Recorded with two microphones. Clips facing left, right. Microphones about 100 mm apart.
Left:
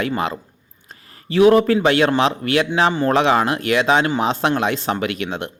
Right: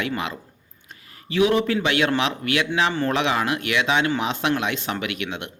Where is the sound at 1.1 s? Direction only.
40° left (ahead or behind).